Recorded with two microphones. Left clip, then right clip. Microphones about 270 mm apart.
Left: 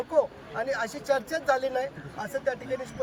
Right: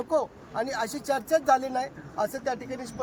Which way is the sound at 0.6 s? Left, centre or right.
Right.